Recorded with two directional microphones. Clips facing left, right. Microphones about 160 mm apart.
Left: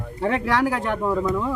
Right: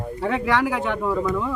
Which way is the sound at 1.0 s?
20° left (ahead or behind).